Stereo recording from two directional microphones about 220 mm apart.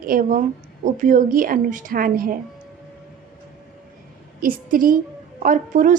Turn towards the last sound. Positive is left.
turn(degrees=-35)  # may be behind; listen again after turning